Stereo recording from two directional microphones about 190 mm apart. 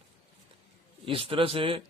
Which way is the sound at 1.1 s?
30° right (ahead or behind).